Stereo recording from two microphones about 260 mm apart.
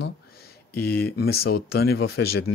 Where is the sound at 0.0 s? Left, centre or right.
Left.